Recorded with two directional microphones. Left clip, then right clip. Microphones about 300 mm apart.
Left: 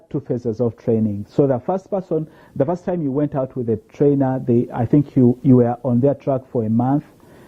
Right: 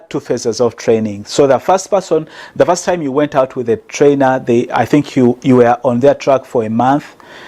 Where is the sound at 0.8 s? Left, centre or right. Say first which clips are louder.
Right 7 dB; centre.